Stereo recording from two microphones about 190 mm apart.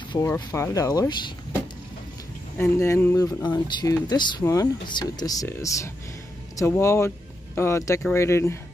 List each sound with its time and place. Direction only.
0.1 s speech: 15° left (ahead or behind)